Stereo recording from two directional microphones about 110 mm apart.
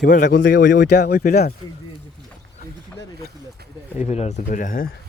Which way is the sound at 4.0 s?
85° left.